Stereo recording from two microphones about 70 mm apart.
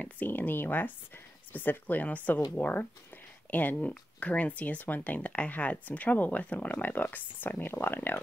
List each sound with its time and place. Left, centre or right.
0.0 s speech: left